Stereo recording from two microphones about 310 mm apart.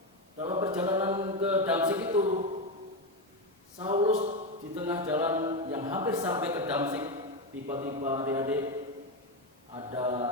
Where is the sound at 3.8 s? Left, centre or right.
Centre.